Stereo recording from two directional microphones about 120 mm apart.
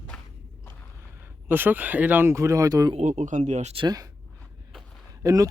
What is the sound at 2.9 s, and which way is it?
Speech, 80° right.